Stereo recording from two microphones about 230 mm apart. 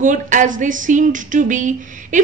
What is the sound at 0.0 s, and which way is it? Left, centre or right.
A woman's voice, right.